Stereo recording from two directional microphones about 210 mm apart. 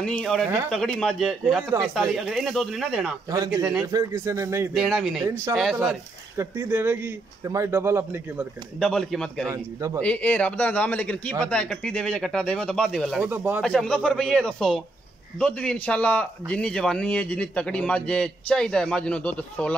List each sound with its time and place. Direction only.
0.2 s a man's voice: centre (ahead or behind)
3.3 s speech: 15° right (ahead or behind)
4.7 s a man's voice: centre (ahead or behind)
6.3 s speech: 10° right (ahead or behind)
8.7 s a man's voice: centre (ahead or behind)
9.5 s speech: 15° right (ahead or behind)
9.9 s a man's voice: 5° left (ahead or behind)
13.7 s a man's voice: 5° left (ahead or behind)